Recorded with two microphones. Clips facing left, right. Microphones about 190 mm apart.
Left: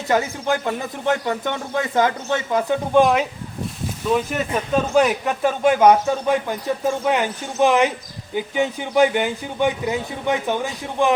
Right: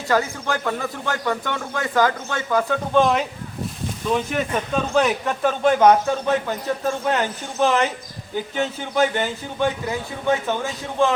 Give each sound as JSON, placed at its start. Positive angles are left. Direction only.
{"t": 0.1, "sound": "speech", "side_deg": 20}